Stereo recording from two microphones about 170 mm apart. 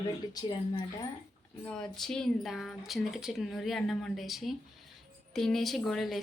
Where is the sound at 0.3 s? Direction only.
25° left (ahead or behind).